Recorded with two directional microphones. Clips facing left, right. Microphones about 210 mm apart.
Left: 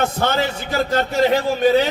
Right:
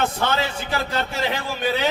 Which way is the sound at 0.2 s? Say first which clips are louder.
Left 3 dB; 45° left (ahead or behind).